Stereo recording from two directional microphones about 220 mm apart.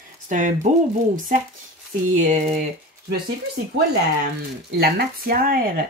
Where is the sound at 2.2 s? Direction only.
30° right (ahead or behind).